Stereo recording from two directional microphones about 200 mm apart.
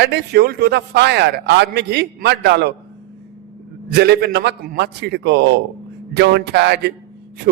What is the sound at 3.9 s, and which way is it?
A man's voice, 55° right (ahead or behind).